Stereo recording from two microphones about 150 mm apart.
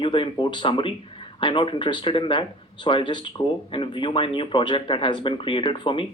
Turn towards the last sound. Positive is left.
turn(degrees=35)  # may be behind; listen again after turning